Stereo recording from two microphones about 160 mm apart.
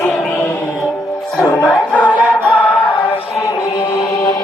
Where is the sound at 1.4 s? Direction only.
5° left (ahead or behind).